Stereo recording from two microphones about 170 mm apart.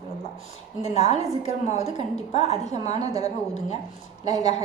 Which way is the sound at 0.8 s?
40° left (ahead or behind).